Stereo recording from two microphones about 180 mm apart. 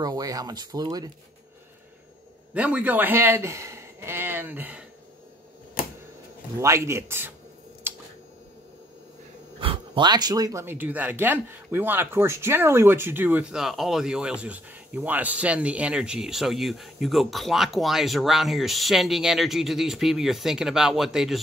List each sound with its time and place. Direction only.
0.0 s speech: 20° right (ahead or behind)
2.5 s speech: 5° right (ahead or behind)
6.6 s speech: 15° right (ahead or behind)
7.8 s a sound: 10° right (ahead or behind)
9.6 s speech: 30° right (ahead or behind); by 21.4 s centre (ahead or behind)